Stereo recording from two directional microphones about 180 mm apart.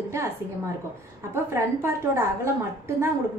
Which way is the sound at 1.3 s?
15° right (ahead or behind).